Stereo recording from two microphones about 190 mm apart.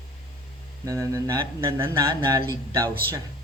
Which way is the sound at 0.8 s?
15° right (ahead or behind).